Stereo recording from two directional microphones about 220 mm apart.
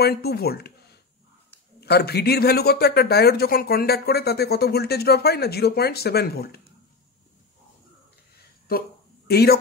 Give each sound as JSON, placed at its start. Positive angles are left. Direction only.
{"t": 0.0, "sound": "speech", "side_deg": 45}
{"t": 1.8, "sound": "speech", "side_deg": 45}
{"t": 8.7, "sound": "speech", "side_deg": 40}